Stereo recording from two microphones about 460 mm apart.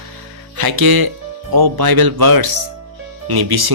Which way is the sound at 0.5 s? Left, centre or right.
Right.